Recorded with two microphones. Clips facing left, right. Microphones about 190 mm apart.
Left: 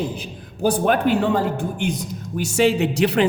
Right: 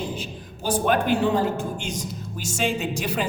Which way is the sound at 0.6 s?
55° left (ahead or behind).